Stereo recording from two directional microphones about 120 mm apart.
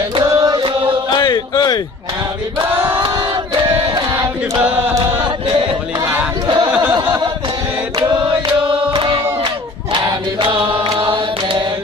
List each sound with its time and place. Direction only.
0.2 s chant: 30° right (ahead or behind)
1.1 s a sound: 35° left (ahead or behind)
4.6 s music: 10° right (ahead or behind)
5.9 s battle cry: 25° right (ahead or behind)
8.9 s battle cry: 40° right (ahead or behind)
10.5 s chant: 45° right (ahead or behind)